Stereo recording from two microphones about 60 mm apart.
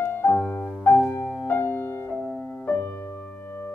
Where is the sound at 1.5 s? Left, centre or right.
Left.